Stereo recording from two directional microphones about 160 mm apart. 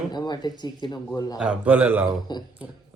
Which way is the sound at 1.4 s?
5° right (ahead or behind).